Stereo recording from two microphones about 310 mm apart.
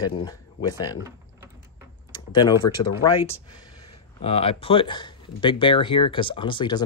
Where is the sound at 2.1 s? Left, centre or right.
Centre.